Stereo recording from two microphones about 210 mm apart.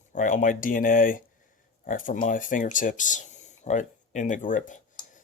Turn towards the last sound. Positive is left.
turn(degrees=35)  # may be behind; listen again after turning